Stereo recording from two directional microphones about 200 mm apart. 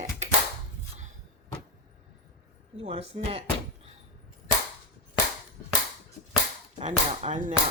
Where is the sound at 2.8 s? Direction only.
30° right (ahead or behind).